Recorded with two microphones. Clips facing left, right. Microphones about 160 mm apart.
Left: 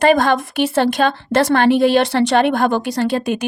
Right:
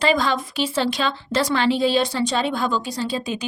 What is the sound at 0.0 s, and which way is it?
A woman's voice, 55° left (ahead or behind).